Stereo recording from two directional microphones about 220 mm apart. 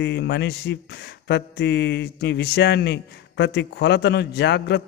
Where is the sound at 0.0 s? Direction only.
50° left (ahead or behind).